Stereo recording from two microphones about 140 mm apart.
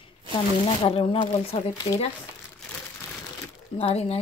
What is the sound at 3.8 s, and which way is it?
Speech, 45° left (ahead or behind).